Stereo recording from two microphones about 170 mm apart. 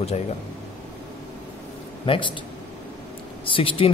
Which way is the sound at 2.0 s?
30° left (ahead or behind).